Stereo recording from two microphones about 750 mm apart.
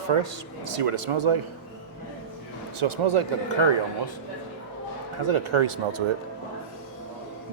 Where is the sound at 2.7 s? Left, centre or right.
Right.